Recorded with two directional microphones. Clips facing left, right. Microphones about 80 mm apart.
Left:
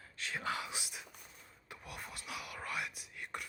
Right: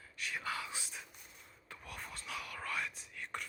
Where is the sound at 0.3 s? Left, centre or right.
Left.